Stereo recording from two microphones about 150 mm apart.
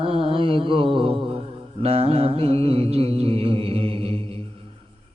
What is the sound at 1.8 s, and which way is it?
Music, 40° right (ahead or behind).